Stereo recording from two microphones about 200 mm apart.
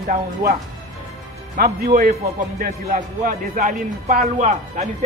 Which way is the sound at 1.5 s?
45° right (ahead or behind).